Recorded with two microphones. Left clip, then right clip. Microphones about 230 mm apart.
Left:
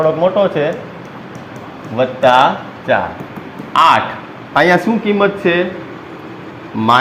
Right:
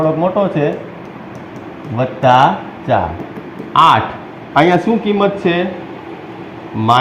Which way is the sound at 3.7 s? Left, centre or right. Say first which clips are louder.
Right 1 dB; left.